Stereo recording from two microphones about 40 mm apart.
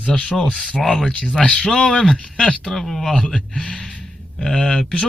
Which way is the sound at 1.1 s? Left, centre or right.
Left.